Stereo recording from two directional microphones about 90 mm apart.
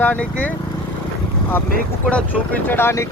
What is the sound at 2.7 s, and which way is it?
Speech, 25° left (ahead or behind).